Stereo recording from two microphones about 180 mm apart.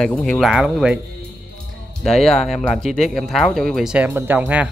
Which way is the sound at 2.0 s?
Centre (ahead or behind).